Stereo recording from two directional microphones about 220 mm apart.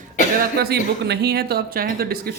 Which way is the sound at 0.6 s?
50° right (ahead or behind).